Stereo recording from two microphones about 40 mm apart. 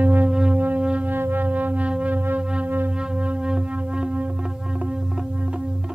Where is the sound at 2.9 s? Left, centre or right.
Right.